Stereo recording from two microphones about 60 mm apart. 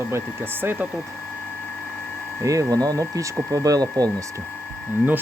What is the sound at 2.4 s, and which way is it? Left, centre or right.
Speech, right.